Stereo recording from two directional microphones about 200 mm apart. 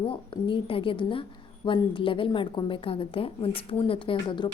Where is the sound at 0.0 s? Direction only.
25° left (ahead or behind).